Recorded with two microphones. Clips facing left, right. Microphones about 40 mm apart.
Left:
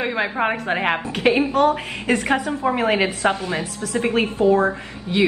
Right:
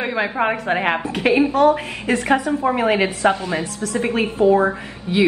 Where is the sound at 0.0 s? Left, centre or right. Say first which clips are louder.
Right 1 dB; centre.